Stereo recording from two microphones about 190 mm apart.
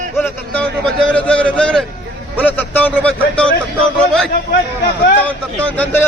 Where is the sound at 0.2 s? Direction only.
5° left (ahead or behind).